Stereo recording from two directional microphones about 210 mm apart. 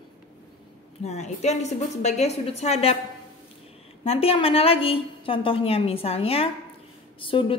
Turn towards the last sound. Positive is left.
turn(degrees=25)  # may be behind; listen again after turning